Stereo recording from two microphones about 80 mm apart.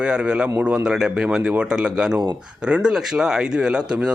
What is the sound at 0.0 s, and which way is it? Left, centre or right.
Speech, centre.